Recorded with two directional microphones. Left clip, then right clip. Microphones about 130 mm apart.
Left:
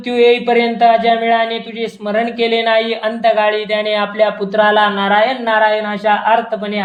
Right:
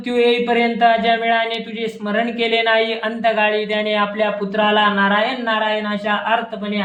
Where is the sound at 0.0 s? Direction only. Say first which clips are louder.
Left 5 dB; 35° left (ahead or behind).